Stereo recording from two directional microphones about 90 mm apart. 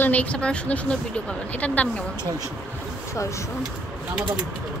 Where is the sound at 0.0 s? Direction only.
15° left (ahead or behind).